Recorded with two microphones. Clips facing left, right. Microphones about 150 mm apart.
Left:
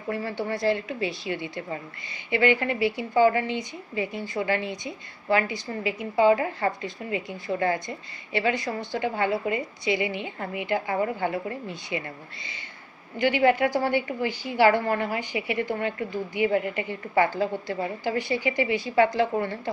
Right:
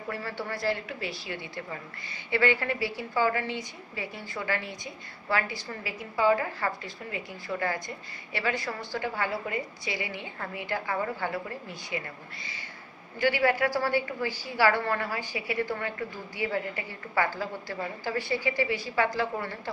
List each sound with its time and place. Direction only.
0.1 s a woman's voice: 20° left (ahead or behind)
13.2 s a woman's voice: 20° left (ahead or behind)